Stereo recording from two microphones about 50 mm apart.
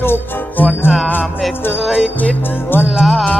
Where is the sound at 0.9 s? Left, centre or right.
Centre.